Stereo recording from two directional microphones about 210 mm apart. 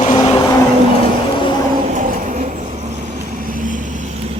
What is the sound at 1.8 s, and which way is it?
Vehicle, 35° right (ahead or behind).